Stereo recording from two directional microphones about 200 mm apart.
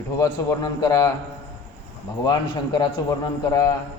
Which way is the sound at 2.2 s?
20° left (ahead or behind).